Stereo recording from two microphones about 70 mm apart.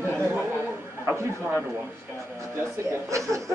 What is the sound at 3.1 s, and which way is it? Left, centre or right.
Speech, right.